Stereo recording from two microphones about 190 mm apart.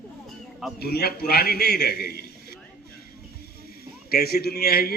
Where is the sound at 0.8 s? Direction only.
55° left (ahead or behind).